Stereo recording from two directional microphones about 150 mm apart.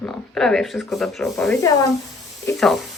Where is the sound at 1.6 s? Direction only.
25° left (ahead or behind).